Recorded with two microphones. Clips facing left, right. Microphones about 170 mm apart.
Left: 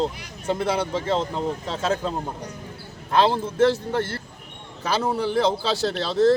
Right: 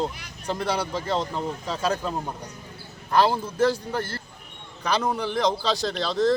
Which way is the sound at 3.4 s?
25° left (ahead or behind).